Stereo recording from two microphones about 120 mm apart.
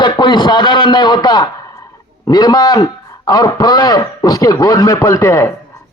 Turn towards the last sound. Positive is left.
turn(degrees=25)  # may be behind; listen again after turning